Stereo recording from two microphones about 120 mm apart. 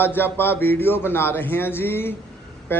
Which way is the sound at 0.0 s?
20° left (ahead or behind).